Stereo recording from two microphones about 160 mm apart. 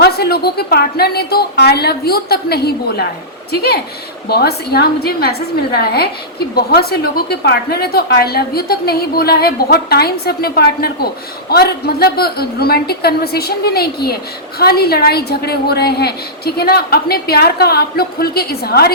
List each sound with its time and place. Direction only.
0.0 s a woman's voice: 80° left